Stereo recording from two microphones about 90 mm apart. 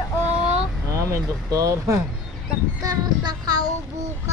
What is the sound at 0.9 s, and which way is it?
Speech, 35° right (ahead or behind).